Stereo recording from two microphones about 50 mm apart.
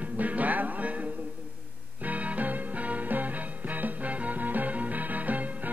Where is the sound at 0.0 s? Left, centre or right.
Right.